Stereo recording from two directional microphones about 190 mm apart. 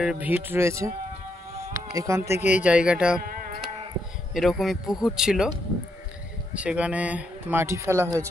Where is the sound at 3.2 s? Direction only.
50° right (ahead or behind).